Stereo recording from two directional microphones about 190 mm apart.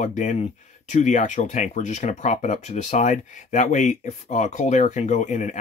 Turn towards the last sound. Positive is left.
turn(degrees=40)  # may be behind; listen again after turning